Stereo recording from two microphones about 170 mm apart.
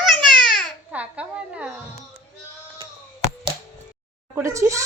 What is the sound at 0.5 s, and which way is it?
Speech, 10° right (ahead or behind).